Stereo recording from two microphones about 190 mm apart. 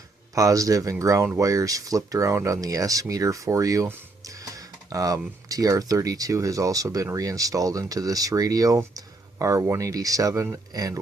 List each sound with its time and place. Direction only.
0.3 s speech: 15° right (ahead or behind)